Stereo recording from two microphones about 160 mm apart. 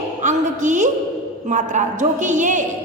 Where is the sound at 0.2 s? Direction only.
50° right (ahead or behind).